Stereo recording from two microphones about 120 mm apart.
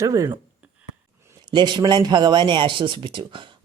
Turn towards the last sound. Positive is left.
turn(degrees=-45)  # may be behind; listen again after turning